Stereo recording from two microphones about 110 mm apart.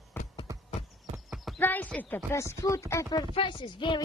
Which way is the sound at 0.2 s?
20° left (ahead or behind).